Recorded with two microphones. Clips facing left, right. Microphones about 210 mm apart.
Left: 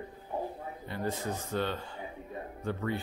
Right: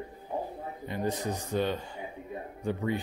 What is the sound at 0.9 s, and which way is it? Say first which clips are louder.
Speech: right 3 dB; 15° right (ahead or behind).